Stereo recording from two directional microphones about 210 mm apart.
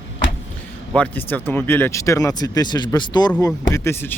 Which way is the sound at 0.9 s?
10° left (ahead or behind).